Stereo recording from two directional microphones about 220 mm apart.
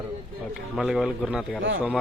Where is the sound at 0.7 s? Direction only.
Centre (ahead or behind).